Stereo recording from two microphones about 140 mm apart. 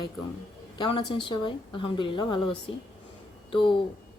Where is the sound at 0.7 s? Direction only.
35° left (ahead or behind).